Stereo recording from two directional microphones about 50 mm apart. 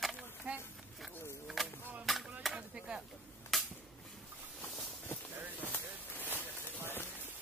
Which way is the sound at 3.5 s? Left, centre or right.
Centre.